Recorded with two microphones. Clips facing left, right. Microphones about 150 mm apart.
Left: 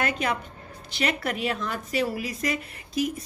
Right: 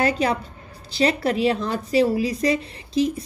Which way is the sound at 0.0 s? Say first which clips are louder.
Right 6 dB; 35° right (ahead or behind).